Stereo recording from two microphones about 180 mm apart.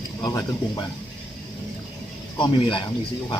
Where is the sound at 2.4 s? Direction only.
25° left (ahead or behind).